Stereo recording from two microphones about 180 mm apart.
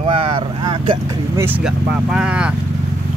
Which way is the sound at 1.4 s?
5° right (ahead or behind).